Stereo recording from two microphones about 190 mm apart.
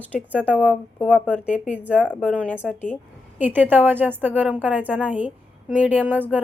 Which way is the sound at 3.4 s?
10° right (ahead or behind).